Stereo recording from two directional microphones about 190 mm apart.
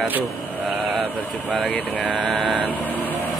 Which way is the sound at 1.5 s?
Centre (ahead or behind).